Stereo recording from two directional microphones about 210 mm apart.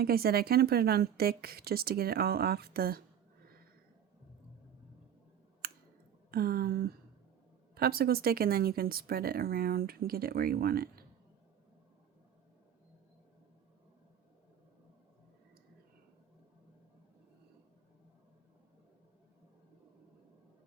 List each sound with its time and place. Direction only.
0.0 s speech: 45° right (ahead or behind)
5.6 s a sound: 45° right (ahead or behind)
6.3 s speech: 45° right (ahead or behind)